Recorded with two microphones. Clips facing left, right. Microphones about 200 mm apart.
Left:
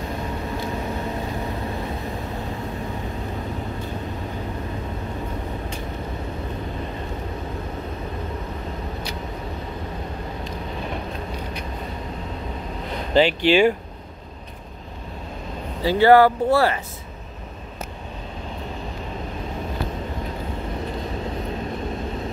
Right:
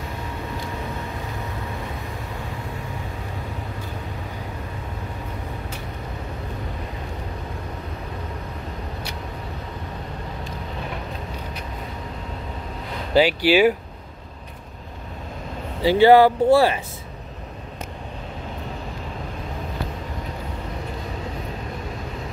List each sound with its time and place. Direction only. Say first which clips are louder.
13.1 s speech: even; 5° right (ahead or behind)
15.8 s speech: right 1 dB; 15° right (ahead or behind)